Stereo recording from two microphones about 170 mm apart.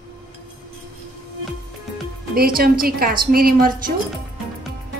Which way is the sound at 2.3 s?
60° right (ahead or behind).